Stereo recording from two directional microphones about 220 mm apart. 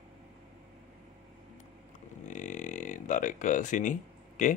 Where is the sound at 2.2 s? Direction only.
35° left (ahead or behind).